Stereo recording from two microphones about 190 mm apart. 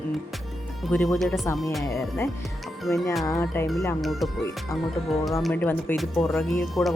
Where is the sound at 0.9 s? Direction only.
Centre (ahead or behind).